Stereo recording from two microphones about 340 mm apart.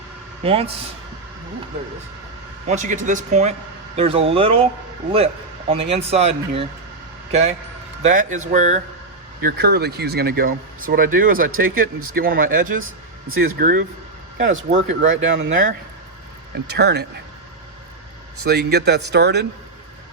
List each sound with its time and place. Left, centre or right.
0.4 s speech: centre
2.6 s speech: right
5.9 s a man's voice: centre
15.1 s speech: right
18.4 s speech: right